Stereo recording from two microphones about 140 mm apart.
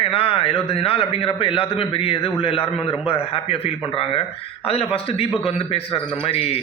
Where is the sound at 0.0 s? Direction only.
40° left (ahead or behind).